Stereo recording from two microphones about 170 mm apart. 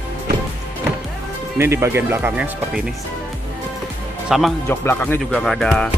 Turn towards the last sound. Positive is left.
turn(degrees=5)  # may be behind; listen again after turning